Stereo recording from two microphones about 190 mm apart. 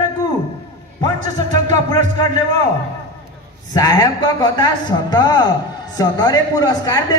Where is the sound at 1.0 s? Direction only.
20° left (ahead or behind).